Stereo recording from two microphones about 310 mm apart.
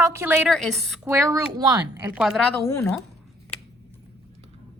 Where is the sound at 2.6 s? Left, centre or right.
Centre.